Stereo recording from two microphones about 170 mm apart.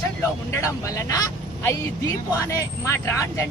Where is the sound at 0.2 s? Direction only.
15° left (ahead or behind).